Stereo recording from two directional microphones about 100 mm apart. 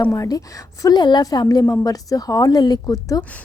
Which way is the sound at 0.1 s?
35° left (ahead or behind).